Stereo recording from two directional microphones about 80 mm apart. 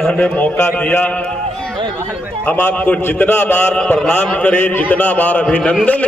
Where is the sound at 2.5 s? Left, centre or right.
Centre.